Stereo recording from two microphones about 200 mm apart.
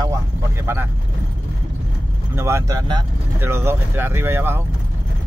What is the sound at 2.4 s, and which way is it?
Speech, 15° right (ahead or behind).